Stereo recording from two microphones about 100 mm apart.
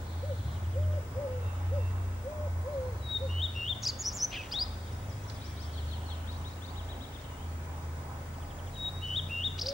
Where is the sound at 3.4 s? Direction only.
Centre (ahead or behind).